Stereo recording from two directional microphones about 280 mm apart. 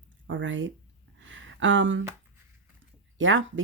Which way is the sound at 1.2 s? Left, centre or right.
Right.